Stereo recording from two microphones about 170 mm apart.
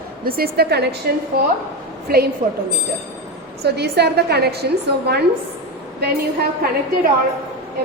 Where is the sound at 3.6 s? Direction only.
70° right (ahead or behind).